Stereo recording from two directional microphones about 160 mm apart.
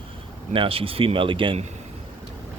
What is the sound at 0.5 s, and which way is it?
Speech, 35° right (ahead or behind).